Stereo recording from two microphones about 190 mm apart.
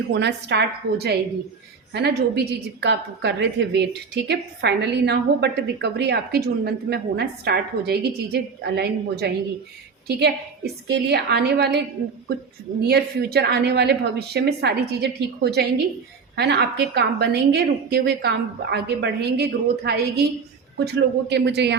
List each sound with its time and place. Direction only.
0.1 s a woman's voice: 60° right (ahead or behind)
12.8 s a woman's voice: 60° right (ahead or behind)